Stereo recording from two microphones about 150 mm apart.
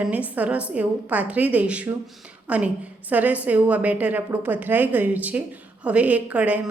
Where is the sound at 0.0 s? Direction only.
10° right (ahead or behind).